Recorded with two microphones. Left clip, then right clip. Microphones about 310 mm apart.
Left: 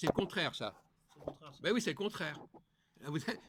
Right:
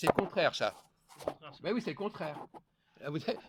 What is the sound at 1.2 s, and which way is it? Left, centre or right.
Speech, right.